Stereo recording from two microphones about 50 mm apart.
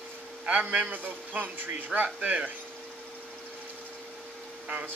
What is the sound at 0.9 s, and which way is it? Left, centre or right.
Speech, right.